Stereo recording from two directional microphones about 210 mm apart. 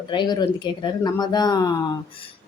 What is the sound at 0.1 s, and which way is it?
Speech, 20° left (ahead or behind).